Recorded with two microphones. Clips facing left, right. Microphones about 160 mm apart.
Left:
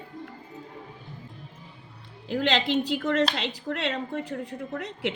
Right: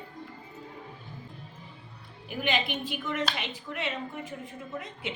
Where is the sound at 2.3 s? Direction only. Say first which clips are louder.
Left 6 dB; 90° left.